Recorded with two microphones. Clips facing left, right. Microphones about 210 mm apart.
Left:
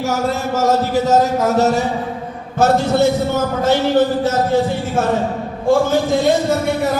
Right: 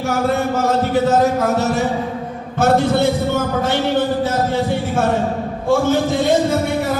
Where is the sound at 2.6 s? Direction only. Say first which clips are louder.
Left 1 dB; 55° right (ahead or behind).